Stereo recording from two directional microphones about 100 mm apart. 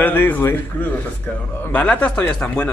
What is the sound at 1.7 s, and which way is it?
Speech, 15° left (ahead or behind).